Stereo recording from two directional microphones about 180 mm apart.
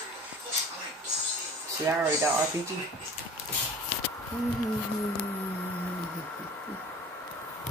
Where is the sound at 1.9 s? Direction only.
15° right (ahead or behind).